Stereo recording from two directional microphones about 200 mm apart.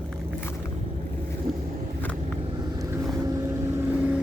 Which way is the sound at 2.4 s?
20° right (ahead or behind).